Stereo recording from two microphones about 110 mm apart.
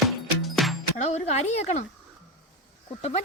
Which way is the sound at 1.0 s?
85° left.